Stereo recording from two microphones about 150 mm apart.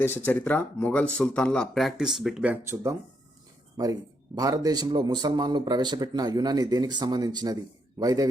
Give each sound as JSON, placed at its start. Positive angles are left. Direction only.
{"t": 0.3, "sound": "speech", "side_deg": 10}
{"t": 4.4, "sound": "speech", "side_deg": -25}